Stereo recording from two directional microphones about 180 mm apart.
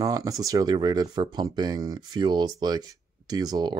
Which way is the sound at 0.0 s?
20° right (ahead or behind).